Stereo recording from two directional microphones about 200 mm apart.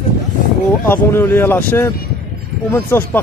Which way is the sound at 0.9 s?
10° left (ahead or behind).